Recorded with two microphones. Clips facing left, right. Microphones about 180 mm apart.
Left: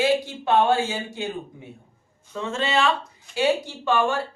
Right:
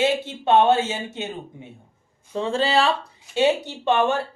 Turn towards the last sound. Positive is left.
turn(degrees=-20)  # may be behind; listen again after turning